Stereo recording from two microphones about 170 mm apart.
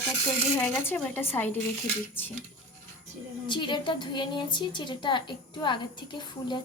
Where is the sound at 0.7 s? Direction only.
10° left (ahead or behind).